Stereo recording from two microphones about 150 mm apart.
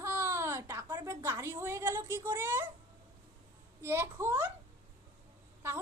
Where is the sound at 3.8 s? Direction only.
15° right (ahead or behind).